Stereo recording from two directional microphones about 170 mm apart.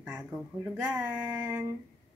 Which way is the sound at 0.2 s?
Centre (ahead or behind).